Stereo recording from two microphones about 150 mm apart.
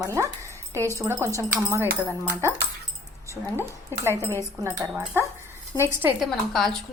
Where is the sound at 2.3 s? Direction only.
15° right (ahead or behind).